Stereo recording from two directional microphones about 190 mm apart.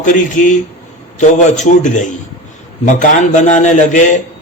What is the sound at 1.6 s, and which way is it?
A man's voice, 40° left (ahead or behind).